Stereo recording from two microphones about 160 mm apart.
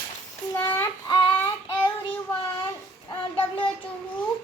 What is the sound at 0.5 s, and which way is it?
Child singing, 15° left (ahead or behind).